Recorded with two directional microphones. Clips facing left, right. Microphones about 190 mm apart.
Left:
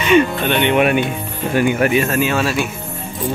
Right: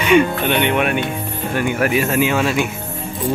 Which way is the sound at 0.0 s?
10° right (ahead or behind).